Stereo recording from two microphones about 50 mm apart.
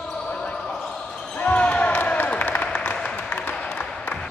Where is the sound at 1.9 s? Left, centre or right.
Left.